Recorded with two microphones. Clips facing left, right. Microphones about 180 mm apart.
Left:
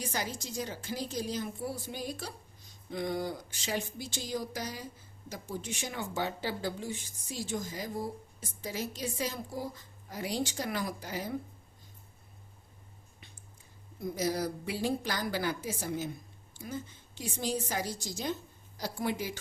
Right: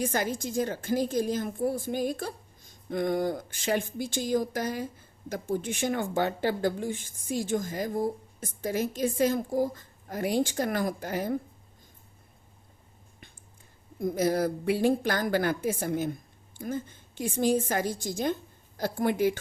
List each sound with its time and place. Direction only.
0.0 s a woman's voice: 50° right (ahead or behind)
14.0 s a woman's voice: 50° right (ahead or behind)